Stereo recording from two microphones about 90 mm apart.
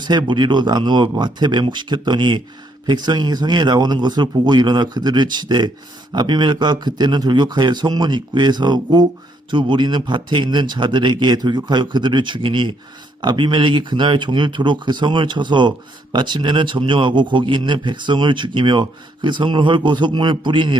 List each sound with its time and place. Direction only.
0.0 s a man's voice: 55° right (ahead or behind)